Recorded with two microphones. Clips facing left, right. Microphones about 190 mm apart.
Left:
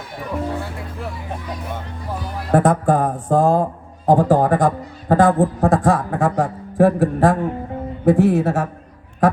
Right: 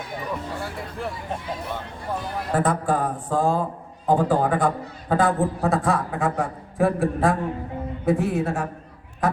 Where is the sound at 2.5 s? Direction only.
50° left (ahead or behind).